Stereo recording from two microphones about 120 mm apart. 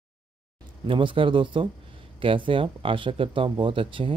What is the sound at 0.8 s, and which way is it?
Speech, 45° right (ahead or behind).